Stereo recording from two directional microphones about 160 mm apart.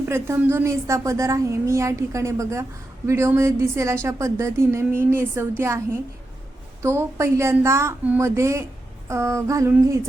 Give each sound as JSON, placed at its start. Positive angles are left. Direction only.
{"t": 0.0, "sound": "a woman's voice", "side_deg": -15}
{"t": 6.8, "sound": "a woman's voice", "side_deg": -15}